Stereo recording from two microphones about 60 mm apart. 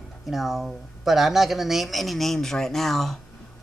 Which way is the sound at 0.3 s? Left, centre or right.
Centre.